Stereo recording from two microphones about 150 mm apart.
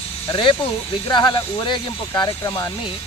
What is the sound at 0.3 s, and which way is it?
Speech, 35° left (ahead or behind).